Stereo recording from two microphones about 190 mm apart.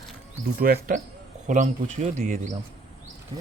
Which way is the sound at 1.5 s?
40° right (ahead or behind).